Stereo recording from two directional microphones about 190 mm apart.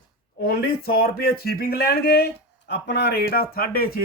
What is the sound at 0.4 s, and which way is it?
Speech, 50° left (ahead or behind).